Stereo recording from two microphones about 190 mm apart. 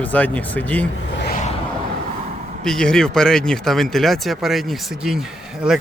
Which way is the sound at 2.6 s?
5° left (ahead or behind).